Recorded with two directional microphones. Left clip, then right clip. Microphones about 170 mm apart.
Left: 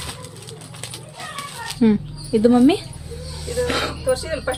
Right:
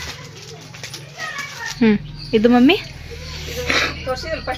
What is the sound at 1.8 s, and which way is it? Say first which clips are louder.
Speech: right 2 dB; 5° right (ahead or behind).